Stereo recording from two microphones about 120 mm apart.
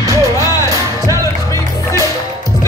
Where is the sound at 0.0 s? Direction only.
25° right (ahead or behind).